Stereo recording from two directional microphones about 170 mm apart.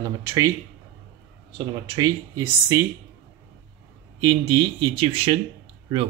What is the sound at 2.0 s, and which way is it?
Speech, 20° right (ahead or behind).